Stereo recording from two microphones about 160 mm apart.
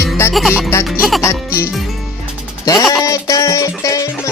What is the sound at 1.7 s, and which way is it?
Speech, centre (ahead or behind).